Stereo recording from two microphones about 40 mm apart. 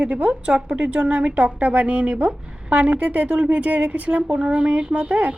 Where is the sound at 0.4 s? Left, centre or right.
Right.